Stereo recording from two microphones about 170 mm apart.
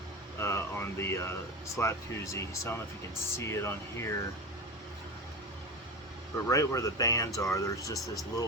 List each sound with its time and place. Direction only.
0.3 s speech: 15° left (ahead or behind)
6.3 s speech: 20° left (ahead or behind)